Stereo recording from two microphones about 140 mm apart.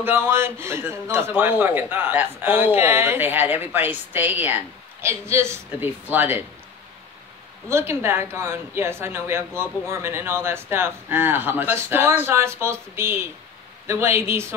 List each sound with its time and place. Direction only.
0.0 s a man's voice: 15° right (ahead or behind)
7.6 s a man's voice: 20° right (ahead or behind)